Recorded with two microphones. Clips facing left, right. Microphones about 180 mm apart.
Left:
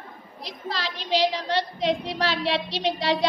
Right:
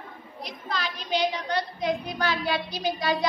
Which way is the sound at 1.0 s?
90° left.